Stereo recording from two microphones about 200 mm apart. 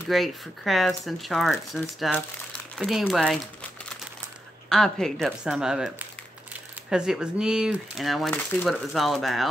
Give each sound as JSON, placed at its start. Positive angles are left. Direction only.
{"t": 0.1, "sound": "speech", "side_deg": 0}
{"t": 4.6, "sound": "speech", "side_deg": 0}